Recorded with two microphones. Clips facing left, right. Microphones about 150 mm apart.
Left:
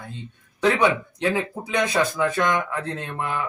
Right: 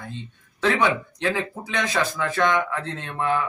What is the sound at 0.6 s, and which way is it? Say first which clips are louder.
Speech: left 2 dB; 15° left (ahead or behind).